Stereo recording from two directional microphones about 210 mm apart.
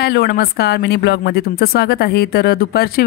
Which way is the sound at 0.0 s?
50° left (ahead or behind).